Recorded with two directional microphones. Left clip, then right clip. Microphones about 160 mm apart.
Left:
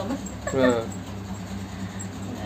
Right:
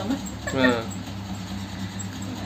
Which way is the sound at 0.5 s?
10° left (ahead or behind).